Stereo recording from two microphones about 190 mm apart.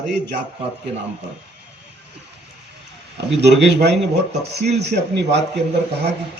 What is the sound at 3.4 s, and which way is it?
A man's voice, 65° right (ahead or behind).